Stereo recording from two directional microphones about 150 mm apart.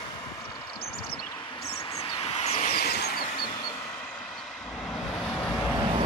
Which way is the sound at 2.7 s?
90° left.